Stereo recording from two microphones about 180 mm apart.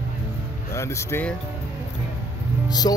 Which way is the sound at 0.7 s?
15° left (ahead or behind).